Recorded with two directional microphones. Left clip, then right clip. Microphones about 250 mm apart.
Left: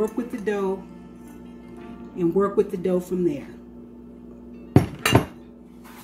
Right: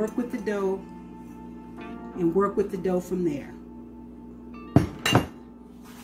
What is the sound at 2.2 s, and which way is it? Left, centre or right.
Speech, centre.